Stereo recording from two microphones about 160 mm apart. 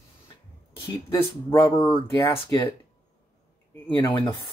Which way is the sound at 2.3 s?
25° left (ahead or behind).